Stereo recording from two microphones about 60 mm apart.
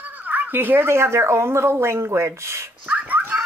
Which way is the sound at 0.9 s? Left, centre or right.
Right.